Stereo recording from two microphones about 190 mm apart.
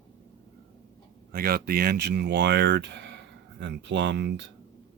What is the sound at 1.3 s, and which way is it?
Speech, 50° right (ahead or behind).